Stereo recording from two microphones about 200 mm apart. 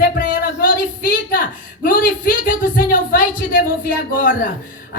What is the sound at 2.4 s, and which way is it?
A woman's voice, 45° left (ahead or behind).